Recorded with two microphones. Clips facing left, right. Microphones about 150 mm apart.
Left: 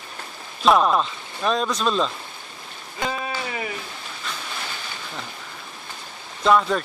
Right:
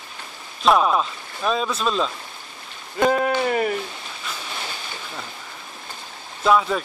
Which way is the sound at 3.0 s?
55° right (ahead or behind).